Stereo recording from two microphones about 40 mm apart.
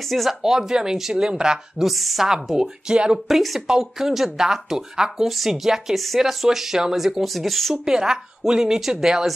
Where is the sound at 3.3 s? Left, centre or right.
Centre.